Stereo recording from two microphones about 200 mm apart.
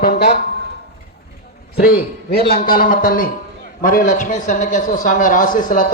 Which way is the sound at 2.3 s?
50° left (ahead or behind).